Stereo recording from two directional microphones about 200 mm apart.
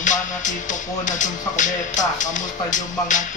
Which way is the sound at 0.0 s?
40° left (ahead or behind).